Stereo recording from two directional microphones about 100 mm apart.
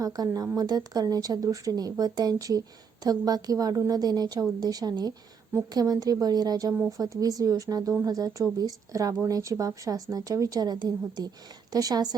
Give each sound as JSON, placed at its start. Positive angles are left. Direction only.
{"t": 0.0, "sound": "speech", "side_deg": -35}